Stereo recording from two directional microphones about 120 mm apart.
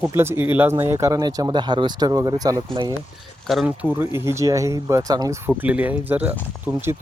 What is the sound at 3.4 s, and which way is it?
Speech, centre (ahead or behind).